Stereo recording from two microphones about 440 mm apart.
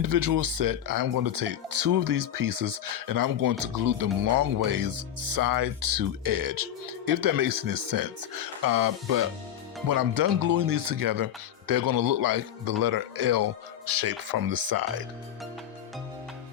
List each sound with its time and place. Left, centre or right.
0.0 s speech: right